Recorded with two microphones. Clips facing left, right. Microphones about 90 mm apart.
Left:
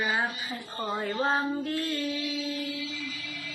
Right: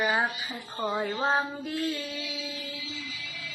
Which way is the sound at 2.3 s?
50° left (ahead or behind).